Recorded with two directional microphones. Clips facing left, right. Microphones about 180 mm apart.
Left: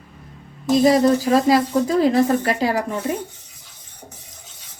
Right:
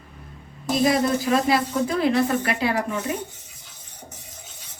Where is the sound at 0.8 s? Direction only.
35° left (ahead or behind).